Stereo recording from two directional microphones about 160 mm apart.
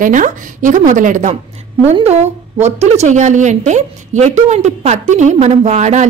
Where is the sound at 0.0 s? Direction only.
55° right (ahead or behind).